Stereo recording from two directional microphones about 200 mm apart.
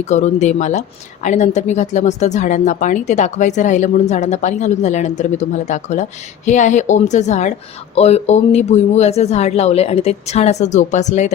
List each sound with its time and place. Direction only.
0.0 s a woman's voice: 35° left (ahead or behind)